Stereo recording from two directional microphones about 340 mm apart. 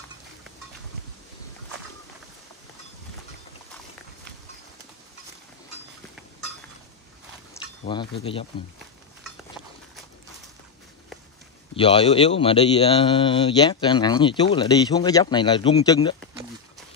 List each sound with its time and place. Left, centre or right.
7.8 s speech: centre
11.7 s speech: centre